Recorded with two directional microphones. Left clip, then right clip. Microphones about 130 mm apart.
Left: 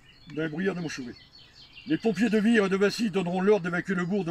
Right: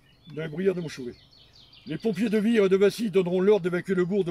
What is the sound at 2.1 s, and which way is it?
Speech, 60° right (ahead or behind).